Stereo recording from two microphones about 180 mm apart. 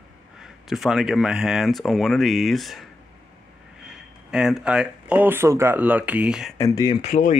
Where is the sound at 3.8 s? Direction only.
5° right (ahead or behind).